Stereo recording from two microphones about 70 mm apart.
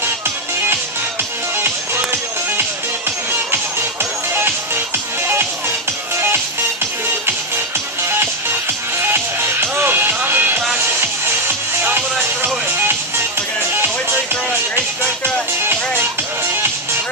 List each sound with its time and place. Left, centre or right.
3.5 s music: right
8.1 s music: right
15.6 s music: right